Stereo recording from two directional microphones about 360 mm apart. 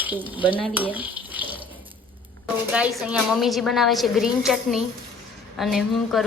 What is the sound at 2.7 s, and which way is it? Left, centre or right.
A woman's voice, centre.